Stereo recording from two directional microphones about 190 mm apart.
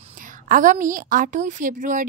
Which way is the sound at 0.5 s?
45° right (ahead or behind).